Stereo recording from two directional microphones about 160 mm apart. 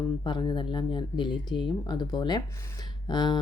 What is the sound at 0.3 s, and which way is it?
Speech, 30° left (ahead or behind).